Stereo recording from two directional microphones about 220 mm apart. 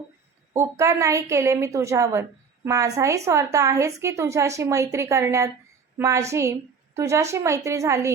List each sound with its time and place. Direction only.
0.5 s a woman's voice: 15° right (ahead or behind)